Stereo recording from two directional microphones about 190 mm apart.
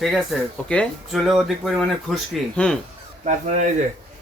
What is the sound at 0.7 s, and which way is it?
Speech, centre (ahead or behind).